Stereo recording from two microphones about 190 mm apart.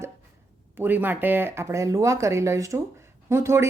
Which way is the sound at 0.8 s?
10° right (ahead or behind).